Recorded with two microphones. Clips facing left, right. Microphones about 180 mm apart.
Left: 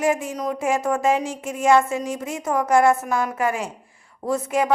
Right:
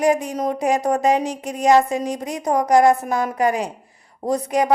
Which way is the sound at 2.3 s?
40° right (ahead or behind).